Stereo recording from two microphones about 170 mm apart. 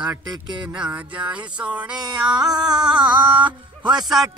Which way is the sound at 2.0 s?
25° right (ahead or behind).